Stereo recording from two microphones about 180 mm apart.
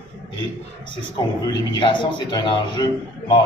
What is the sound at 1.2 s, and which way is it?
Speech, 20° left (ahead or behind).